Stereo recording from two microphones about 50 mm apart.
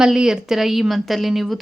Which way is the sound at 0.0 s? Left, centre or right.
Centre.